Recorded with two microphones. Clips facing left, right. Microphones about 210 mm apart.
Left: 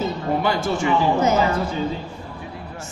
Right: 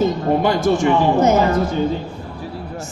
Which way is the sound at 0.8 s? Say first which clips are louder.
Right 2 dB; 50° right (ahead or behind).